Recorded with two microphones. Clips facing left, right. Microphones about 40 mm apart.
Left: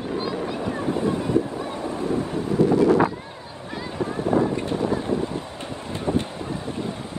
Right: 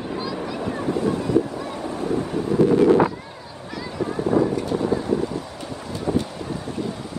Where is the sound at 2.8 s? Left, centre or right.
Right.